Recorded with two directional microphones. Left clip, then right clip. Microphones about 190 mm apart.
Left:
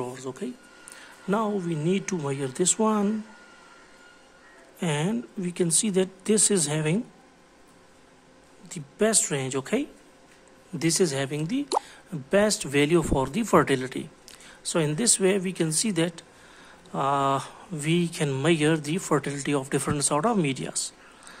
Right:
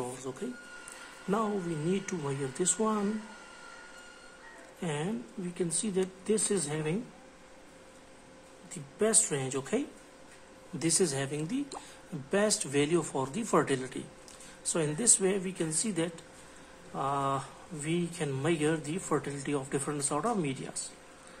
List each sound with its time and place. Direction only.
0.0 s speech: 50° left (ahead or behind)
4.7 s speech: 55° left (ahead or behind)
8.6 s speech: 55° left (ahead or behind)